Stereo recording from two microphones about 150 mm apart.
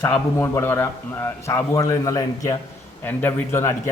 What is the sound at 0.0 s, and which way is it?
A man's voice, 15° left (ahead or behind).